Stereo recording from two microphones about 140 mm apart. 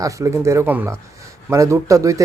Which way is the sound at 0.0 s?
20° right (ahead or behind).